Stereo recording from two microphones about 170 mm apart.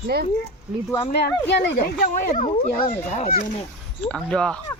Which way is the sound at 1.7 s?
45° left (ahead or behind).